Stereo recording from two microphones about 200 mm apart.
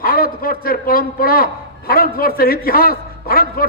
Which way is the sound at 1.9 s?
50° left (ahead or behind).